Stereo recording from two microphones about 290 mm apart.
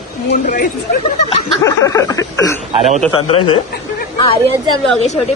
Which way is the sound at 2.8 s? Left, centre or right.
Right.